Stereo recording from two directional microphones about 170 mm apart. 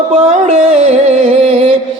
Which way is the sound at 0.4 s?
40° right (ahead or behind).